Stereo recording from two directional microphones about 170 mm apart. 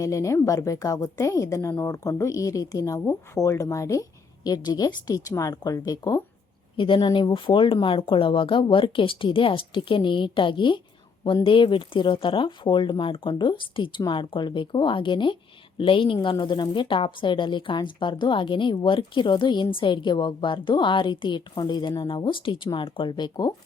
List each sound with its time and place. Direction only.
0.0 s a woman's voice: 20° left (ahead or behind)